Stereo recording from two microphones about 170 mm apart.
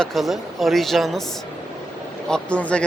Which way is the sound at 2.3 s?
5° left (ahead or behind).